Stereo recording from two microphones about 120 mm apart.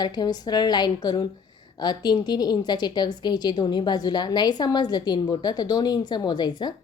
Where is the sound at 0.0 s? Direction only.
35° left (ahead or behind).